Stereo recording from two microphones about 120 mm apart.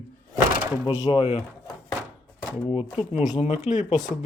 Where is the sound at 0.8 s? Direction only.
55° left (ahead or behind).